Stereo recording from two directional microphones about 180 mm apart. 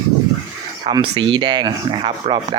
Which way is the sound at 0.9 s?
25° right (ahead or behind).